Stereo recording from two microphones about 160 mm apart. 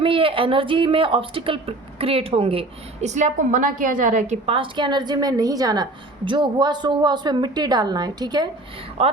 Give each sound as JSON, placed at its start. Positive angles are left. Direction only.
{"t": 0.0, "sound": "speech", "side_deg": -35}
{"t": 4.4, "sound": "a woman's voice", "side_deg": -35}
{"t": 9.0, "sound": "speech", "side_deg": -40}